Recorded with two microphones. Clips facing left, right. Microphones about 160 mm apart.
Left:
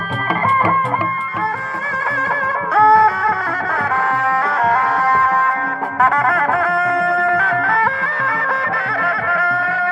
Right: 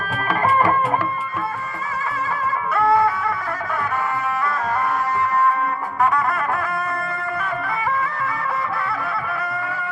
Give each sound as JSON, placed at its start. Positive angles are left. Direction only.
{"t": 2.7, "sound": "music", "side_deg": 80}
{"t": 6.0, "sound": "music", "side_deg": 90}
{"t": 9.0, "sound": "a sound", "side_deg": 75}